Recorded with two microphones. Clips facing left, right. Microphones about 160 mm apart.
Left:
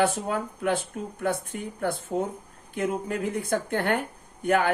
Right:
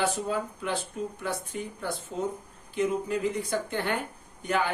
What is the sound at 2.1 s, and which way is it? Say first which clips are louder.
Speech: left 3 dB; 45° left (ahead or behind).